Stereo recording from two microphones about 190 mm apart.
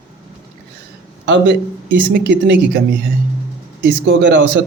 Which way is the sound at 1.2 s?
70° right (ahead or behind).